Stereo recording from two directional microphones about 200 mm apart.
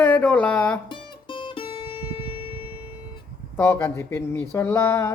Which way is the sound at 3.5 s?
10° left (ahead or behind).